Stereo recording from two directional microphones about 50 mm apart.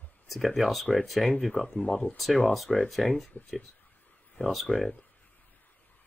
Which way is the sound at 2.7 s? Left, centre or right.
Centre.